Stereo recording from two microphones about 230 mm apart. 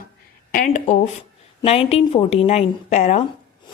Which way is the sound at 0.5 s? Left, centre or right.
Left.